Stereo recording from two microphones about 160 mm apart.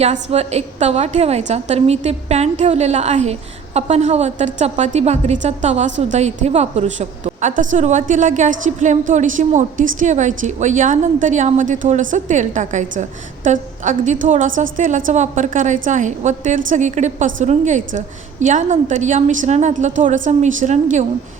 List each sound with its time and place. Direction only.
0.0 s a woman's voice: 40° right (ahead or behind)